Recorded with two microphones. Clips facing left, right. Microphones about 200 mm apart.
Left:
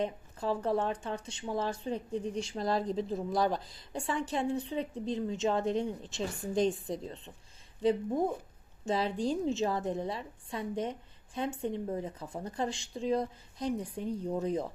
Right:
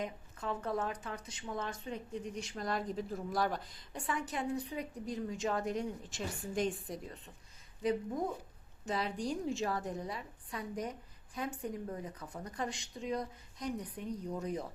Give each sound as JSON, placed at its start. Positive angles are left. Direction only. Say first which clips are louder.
{"t": 0.0, "sound": "speech", "louder": "left 6 dB", "side_deg": 30}